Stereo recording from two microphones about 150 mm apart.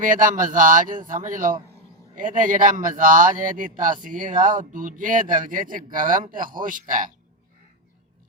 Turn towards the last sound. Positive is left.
turn(degrees=-65)  # may be behind; listen again after turning